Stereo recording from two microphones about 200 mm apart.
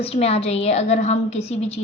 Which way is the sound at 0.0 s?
30° left (ahead or behind).